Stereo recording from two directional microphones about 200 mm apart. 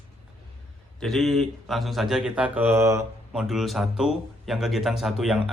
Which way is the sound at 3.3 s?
Centre (ahead or behind).